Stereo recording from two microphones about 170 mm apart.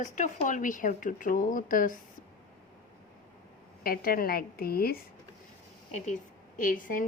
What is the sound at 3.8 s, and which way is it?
A woman's voice, 60° left (ahead or behind).